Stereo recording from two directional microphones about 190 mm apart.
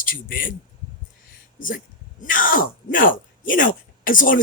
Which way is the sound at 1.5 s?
45° left (ahead or behind).